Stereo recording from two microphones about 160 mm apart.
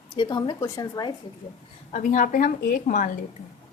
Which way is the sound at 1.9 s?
50° left (ahead or behind).